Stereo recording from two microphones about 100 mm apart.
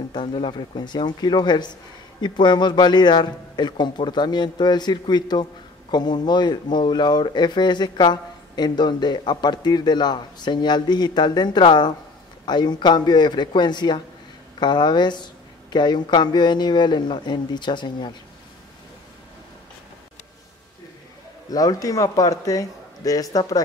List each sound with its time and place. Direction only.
0.1 s a man's voice: 55° left (ahead or behind)
21.5 s a man's voice: 40° left (ahead or behind)